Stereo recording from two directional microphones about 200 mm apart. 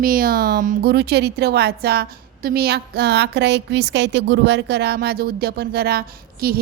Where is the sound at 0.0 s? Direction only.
45° right (ahead or behind).